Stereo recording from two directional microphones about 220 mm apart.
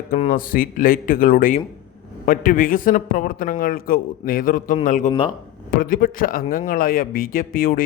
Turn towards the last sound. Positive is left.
turn(degrees=40)  # may be behind; listen again after turning